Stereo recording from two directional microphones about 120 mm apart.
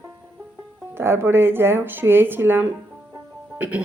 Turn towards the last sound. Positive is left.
turn(degrees=-10)  # may be behind; listen again after turning